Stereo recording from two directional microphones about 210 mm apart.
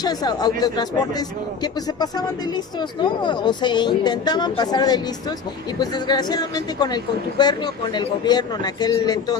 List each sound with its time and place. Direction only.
0.0 s speech: 20° left (ahead or behind)